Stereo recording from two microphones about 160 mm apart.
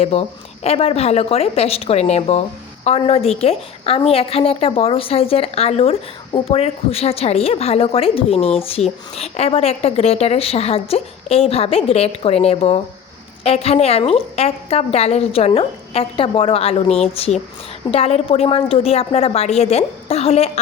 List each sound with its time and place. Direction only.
0.0 s a woman's voice: 40° left (ahead or behind)